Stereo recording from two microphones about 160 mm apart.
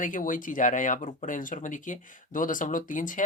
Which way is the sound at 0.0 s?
55° left (ahead or behind).